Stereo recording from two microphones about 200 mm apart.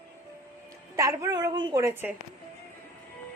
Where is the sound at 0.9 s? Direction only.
15° right (ahead or behind).